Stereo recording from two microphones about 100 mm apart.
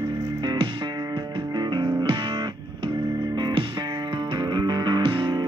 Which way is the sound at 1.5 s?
50° right (ahead or behind).